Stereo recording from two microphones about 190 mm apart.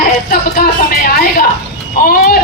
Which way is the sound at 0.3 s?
50° left (ahead or behind).